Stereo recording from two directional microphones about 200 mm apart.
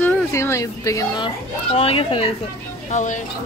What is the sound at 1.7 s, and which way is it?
Speech, 30° left (ahead or behind).